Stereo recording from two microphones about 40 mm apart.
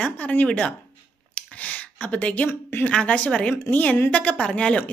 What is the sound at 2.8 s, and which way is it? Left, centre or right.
A woman's voice, left.